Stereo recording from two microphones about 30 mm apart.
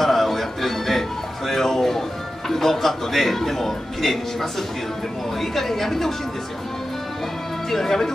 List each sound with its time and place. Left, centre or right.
0.0 s music: centre
5.4 s a woman's voice: centre
7.7 s a woman's voice: centre